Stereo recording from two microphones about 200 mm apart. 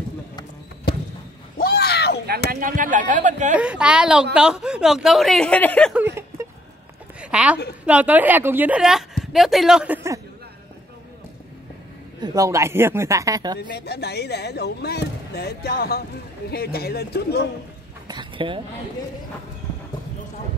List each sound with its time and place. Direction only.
1.6 s a sound: 50° left (ahead or behind)
2.5 s speech: 45° right (ahead or behind)
3.5 s a woman's voice: 5° right (ahead or behind)
7.2 s a sound: 5° right (ahead or behind)
7.8 s a woman's voice: 5° right (ahead or behind)
12.2 s speech: 15° right (ahead or behind)
13.6 s a man's voice: 55° left (ahead or behind)
18.0 s speech: 25° right (ahead or behind)